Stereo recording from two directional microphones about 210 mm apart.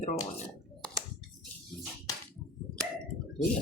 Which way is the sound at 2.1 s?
15° left (ahead or behind).